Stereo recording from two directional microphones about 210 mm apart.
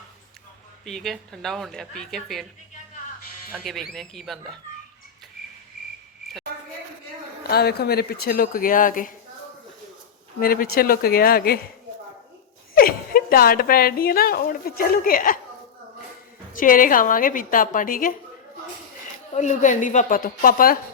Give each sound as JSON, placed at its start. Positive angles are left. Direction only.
{"t": 0.9, "sound": "speech", "side_deg": 0}
{"t": 3.5, "sound": "speech", "side_deg": 0}
{"t": 7.4, "sound": "a woman's voice", "side_deg": 50}
{"t": 10.4, "sound": "a woman's voice", "side_deg": 45}
{"t": 12.7, "sound": "a woman's voice", "side_deg": 45}
{"t": 16.5, "sound": "a woman's voice", "side_deg": 40}
{"t": 19.3, "sound": "a woman's voice", "side_deg": 35}